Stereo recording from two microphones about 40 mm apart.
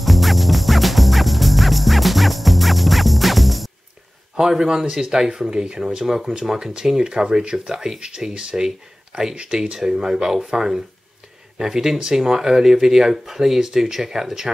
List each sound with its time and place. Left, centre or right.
0.0 s music: centre
4.4 s speech: centre
9.3 s speech: right
9.6 s speech: centre